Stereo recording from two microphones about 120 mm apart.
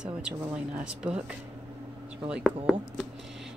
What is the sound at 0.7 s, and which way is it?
Speech, 10° right (ahead or behind).